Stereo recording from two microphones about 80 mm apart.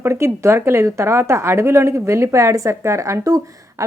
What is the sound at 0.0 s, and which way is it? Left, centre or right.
Speech, right.